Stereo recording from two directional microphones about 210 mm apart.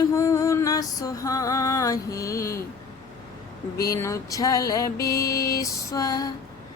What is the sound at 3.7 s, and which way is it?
Female singing, 15° left (ahead or behind).